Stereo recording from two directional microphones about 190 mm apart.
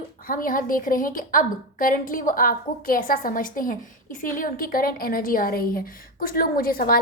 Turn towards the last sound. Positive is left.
turn(degrees=50)  # may be behind; listen again after turning